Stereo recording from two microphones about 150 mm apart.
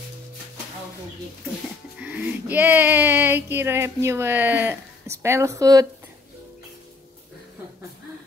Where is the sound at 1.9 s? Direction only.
10° right (ahead or behind).